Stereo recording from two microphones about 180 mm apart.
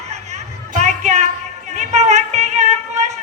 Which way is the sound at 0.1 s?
40° right (ahead or behind).